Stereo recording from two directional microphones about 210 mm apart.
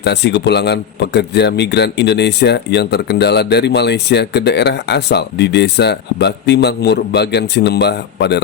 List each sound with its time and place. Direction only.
0.0 s a man's voice: 55° left (ahead or behind)